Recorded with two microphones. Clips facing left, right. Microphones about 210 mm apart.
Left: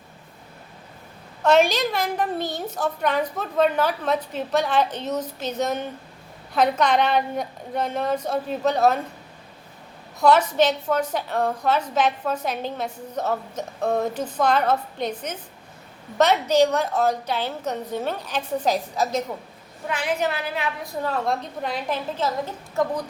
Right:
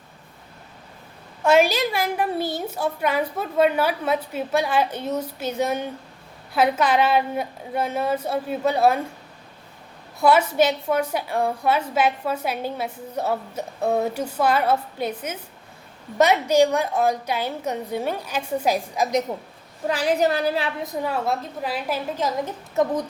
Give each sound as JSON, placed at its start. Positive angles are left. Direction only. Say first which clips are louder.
{"t": 1.5, "sound": "a woman's voice", "louder": "even", "side_deg": -10}
{"t": 10.2, "sound": "a woman's voice", "louder": "even", "side_deg": -10}
{"t": 19.9, "sound": "a woman's voice", "louder": "right 4 dB", "side_deg": -35}
{"t": 20.8, "sound": "a woman's voice", "louder": "right 1 dB", "side_deg": -10}
{"t": 22.4, "sound": "a woman's voice", "louder": "right 2 dB", "side_deg": -20}